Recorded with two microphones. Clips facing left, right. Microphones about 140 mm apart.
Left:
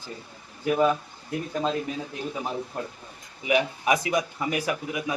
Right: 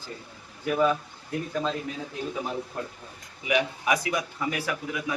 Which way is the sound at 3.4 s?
25° left (ahead or behind).